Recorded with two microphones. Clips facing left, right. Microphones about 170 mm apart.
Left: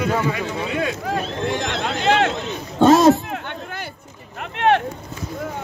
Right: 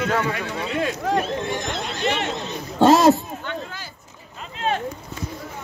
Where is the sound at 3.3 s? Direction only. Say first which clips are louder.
Left 1 dB; 65° left (ahead or behind).